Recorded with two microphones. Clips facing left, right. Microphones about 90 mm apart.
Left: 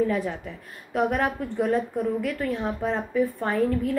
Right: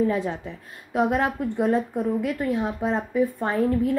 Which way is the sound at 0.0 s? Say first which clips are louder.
Right 1 dB; 20° right (ahead or behind).